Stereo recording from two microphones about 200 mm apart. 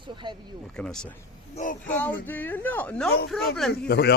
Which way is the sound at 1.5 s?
40° left (ahead or behind).